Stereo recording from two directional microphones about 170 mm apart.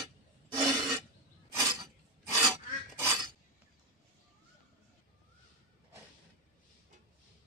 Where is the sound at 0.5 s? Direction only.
25° right (ahead or behind).